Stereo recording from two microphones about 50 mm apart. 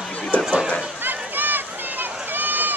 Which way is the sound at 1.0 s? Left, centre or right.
Right.